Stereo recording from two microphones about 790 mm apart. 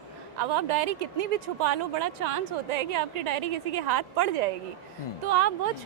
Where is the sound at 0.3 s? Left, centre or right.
Right.